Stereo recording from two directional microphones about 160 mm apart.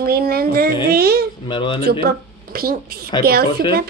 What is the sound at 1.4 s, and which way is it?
Speech, 30° left (ahead or behind).